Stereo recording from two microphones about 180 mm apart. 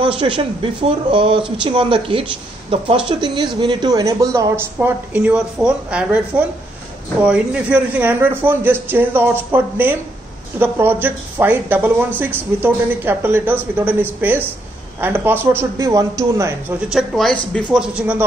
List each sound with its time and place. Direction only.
0.0 s speech: 30° right (ahead or behind)
16.9 s speech: centre (ahead or behind)
17.9 s speech: 10° right (ahead or behind)